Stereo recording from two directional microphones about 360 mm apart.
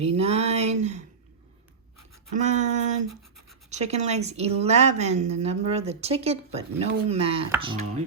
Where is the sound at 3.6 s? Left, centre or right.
Centre.